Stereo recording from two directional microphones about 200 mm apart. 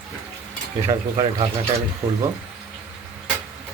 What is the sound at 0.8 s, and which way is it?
Speech, 20° right (ahead or behind).